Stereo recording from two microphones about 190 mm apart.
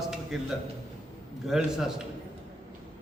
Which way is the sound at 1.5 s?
5° right (ahead or behind).